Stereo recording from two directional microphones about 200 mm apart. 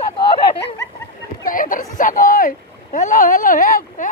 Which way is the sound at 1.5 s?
45° left (ahead or behind).